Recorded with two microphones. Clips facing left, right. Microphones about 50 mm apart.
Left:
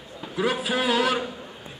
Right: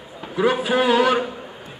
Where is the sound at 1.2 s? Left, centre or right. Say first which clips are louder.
Right 4 dB; centre.